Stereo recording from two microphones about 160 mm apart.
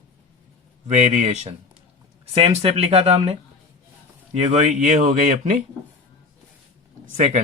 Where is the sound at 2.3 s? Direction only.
35° right (ahead or behind).